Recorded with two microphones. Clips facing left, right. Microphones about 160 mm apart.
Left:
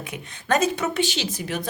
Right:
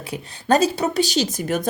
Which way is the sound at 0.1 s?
35° right (ahead or behind).